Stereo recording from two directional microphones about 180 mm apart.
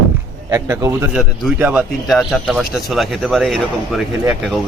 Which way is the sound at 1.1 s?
5° right (ahead or behind).